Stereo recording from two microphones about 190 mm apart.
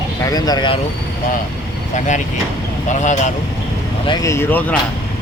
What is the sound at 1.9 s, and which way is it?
Speech, 40° left (ahead or behind).